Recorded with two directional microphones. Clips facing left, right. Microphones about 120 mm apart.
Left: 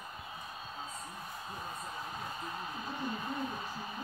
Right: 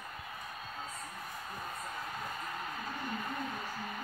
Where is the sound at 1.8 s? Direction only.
20° left (ahead or behind).